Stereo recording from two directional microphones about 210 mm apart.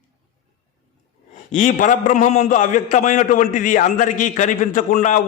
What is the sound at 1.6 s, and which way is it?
A man's voice, 40° left (ahead or behind).